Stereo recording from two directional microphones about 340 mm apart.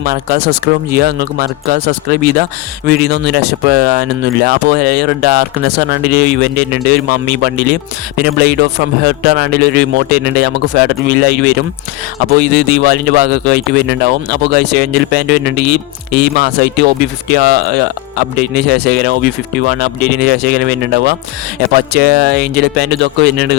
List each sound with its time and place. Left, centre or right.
0.0 s speech: right